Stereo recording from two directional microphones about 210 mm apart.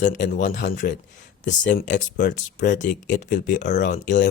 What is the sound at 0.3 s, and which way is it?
Speech, 40° left (ahead or behind).